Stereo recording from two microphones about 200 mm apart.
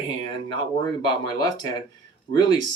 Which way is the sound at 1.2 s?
20° left (ahead or behind).